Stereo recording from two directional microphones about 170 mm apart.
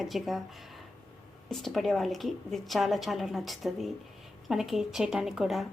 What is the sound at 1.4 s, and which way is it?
A woman's voice, centre (ahead or behind).